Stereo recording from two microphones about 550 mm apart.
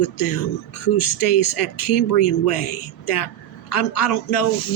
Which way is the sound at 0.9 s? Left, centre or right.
Left.